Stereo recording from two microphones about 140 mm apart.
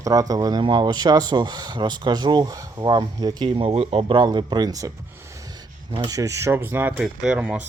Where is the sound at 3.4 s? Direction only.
40° right (ahead or behind).